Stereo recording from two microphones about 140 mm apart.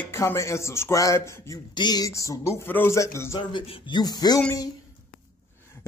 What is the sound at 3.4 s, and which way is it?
A man's voice, 35° left (ahead or behind).